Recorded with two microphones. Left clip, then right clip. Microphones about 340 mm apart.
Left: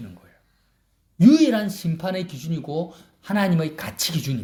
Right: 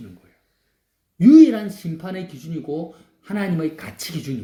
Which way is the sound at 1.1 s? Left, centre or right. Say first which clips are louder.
Right 5 dB; left.